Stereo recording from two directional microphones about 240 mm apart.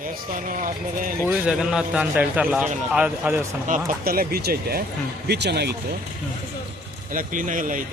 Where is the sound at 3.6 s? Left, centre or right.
Right.